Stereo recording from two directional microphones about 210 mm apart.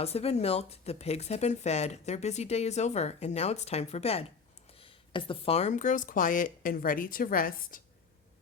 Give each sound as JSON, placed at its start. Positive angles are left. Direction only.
{"t": 0.0, "sound": "speech", "side_deg": 30}